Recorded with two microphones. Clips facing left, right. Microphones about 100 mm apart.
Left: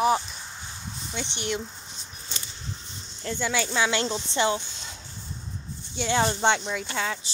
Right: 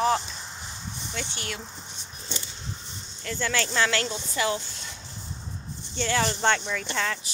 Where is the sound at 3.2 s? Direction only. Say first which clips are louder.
Left 1 dB; 20° left (ahead or behind).